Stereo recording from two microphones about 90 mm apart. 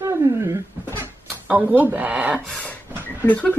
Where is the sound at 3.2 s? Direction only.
15° left (ahead or behind).